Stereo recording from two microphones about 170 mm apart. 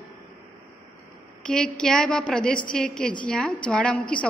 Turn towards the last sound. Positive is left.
turn(degrees=5)  # may be behind; listen again after turning